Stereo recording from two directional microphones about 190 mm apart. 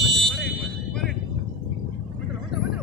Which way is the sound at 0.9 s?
Centre (ahead or behind).